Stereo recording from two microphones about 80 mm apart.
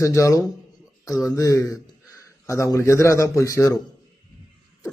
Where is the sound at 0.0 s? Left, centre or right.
Left.